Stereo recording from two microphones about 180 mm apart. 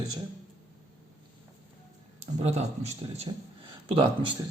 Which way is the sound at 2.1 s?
35° right (ahead or behind).